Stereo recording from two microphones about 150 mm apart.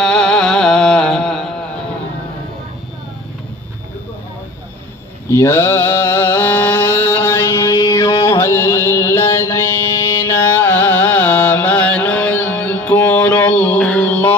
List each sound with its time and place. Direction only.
0.0 s music: 5° left (ahead or behind)
5.3 s mantra: 20° left (ahead or behind)